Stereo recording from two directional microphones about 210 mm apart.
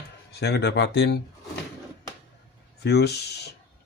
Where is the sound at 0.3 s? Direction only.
50° left (ahead or behind).